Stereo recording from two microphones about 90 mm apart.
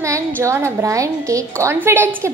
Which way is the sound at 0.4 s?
30° right (ahead or behind).